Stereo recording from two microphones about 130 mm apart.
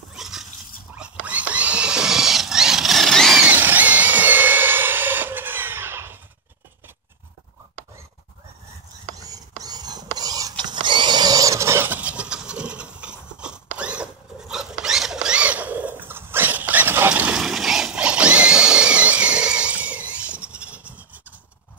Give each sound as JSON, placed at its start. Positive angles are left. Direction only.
{"t": 0.1, "sound": "dog", "side_deg": -5}
{"t": 0.9, "sound": "rodents", "side_deg": -10}
{"t": 3.4, "sound": "a sound", "side_deg": -15}
{"t": 9.1, "sound": "whispering", "side_deg": -25}
{"t": 10.6, "sound": "a sound", "side_deg": -35}
{"t": 14.5, "sound": "rodents", "side_deg": -5}